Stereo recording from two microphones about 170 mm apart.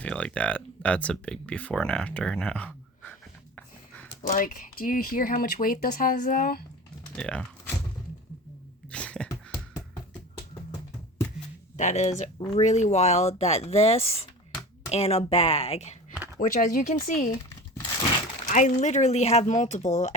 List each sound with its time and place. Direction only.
0.0 s speech: 5° left (ahead or behind)
4.2 s speech: 50° left (ahead or behind)
7.2 s speech: 5° left (ahead or behind)
8.9 s a sound: 5° left (ahead or behind)
11.8 s speech: 45° left (ahead or behind)
16.4 s speech: 50° left (ahead or behind)
18.4 s speech: 45° left (ahead or behind)